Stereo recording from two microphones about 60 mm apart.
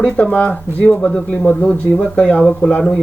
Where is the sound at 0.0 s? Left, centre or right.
Left.